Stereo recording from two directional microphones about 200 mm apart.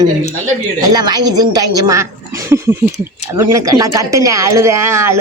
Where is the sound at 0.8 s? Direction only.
20° right (ahead or behind).